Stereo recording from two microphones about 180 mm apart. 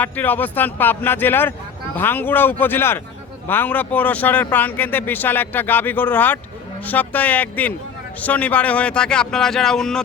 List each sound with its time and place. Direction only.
0.0 s speech: 10° left (ahead or behind)